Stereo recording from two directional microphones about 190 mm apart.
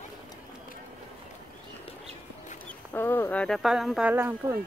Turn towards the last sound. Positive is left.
turn(degrees=-15)  # may be behind; listen again after turning